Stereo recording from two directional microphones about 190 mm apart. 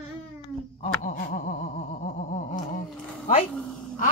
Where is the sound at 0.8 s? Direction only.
40° left (ahead or behind).